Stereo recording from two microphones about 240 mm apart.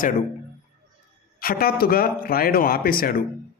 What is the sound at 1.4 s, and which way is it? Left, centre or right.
Speech, left.